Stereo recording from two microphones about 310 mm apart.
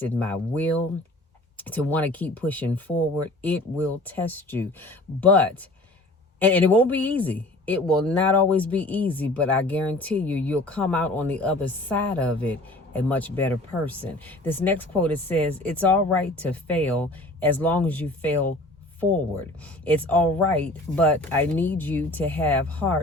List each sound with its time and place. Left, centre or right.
0.0 s speech: centre
19.8 s speech: centre